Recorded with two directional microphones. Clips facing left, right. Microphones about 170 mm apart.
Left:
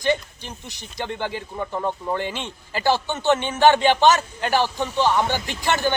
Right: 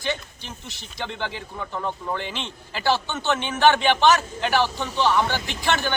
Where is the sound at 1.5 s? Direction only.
20° left (ahead or behind).